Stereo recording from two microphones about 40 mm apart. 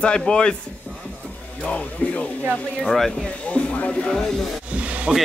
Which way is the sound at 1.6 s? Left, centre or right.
Left.